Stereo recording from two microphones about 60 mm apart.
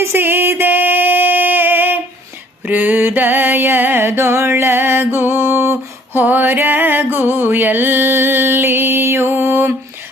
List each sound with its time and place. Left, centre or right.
0.0 s female singing: right
2.6 s music: right